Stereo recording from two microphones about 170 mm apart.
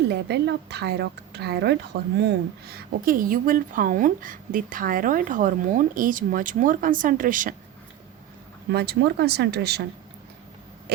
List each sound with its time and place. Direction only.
0.1 s speech: 80° right; by 7.5 s 50° right (ahead or behind)
8.7 s speech: 70° right (ahead or behind)